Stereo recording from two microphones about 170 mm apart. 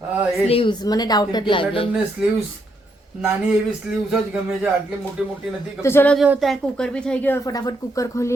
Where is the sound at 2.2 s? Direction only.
5° right (ahead or behind).